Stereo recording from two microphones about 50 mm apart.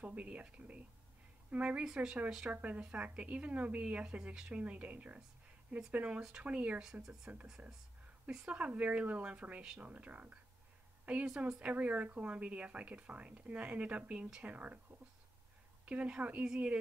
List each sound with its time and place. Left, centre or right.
0.0 s speech: right
6.8 s speech: centre
8.5 s speech: right
11.2 s speech: centre
11.6 s speech: right